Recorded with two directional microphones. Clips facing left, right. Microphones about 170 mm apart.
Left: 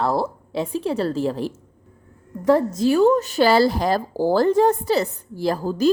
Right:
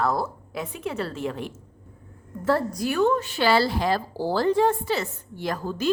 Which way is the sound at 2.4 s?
20° left (ahead or behind).